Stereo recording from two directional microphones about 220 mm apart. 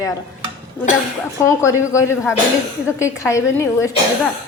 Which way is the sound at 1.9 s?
15° left (ahead or behind).